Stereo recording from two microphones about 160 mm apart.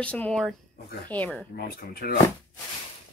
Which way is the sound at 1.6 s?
70° left (ahead or behind).